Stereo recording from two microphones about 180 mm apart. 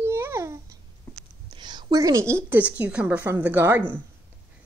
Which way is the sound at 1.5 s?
25° right (ahead or behind).